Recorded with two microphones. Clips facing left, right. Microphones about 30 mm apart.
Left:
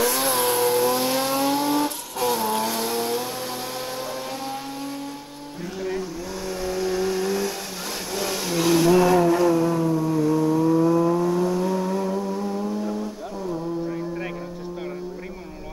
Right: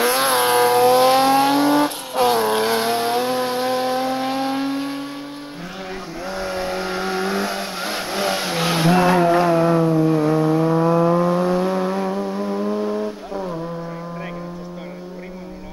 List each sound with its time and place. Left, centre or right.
0.0 s vehicle: right
6.4 s vehicle: right